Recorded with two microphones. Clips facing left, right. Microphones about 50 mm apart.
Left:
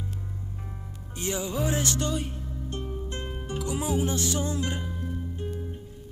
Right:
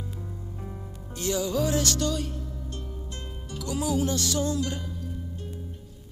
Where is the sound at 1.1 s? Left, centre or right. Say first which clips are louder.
Right 3 dB; left.